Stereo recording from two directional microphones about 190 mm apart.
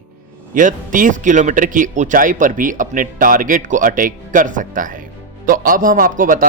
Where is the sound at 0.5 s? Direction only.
45° right (ahead or behind).